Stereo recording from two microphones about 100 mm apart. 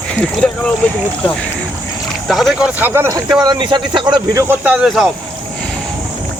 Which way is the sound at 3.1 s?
40° right (ahead or behind).